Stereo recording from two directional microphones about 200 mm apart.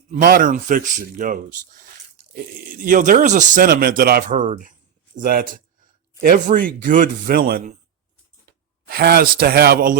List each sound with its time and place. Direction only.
0.1 s speech: 45° right (ahead or behind)
8.9 s speech: 50° right (ahead or behind)